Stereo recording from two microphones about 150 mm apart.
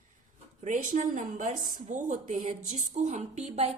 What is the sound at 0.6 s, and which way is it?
A woman's voice, 55° right (ahead or behind).